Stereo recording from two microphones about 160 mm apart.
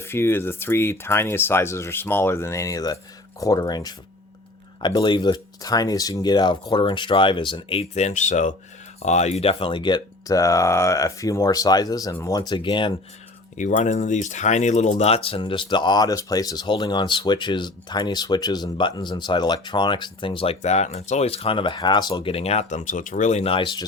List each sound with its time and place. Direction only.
0.0 s speech: 15° left (ahead or behind)
13.6 s speech: 50° left (ahead or behind); by 23.8 s 30° left (ahead or behind)